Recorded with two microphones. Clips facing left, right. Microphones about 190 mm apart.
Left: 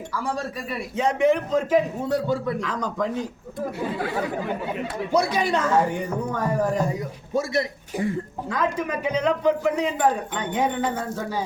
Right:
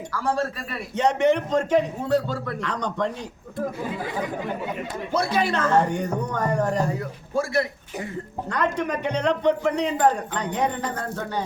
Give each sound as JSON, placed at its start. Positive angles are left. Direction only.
{"t": 0.1, "sound": "speech", "side_deg": 10}
{"t": 2.0, "sound": "speech", "side_deg": 15}
{"t": 2.6, "sound": "speech", "side_deg": 5}
{"t": 5.1, "sound": "speech", "side_deg": 15}
{"t": 8.4, "sound": "speech", "side_deg": 5}